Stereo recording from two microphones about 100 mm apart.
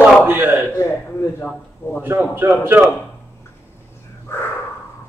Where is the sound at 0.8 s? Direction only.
20° left (ahead or behind).